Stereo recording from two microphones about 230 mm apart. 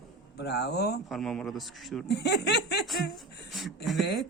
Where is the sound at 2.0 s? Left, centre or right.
Left.